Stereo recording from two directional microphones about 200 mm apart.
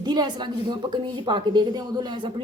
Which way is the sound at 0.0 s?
20° right (ahead or behind).